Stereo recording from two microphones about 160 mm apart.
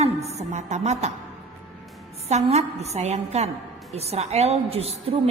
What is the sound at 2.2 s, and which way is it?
A woman's voice, 45° right (ahead or behind).